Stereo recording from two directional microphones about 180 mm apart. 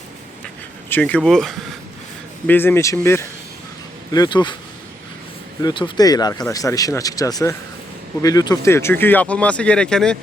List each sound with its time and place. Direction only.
0.9 s speech: 10° left (ahead or behind); by 4.5 s 25° left (ahead or behind)
5.6 s speech: 25° left (ahead or behind); by 10.2 s 5° left (ahead or behind)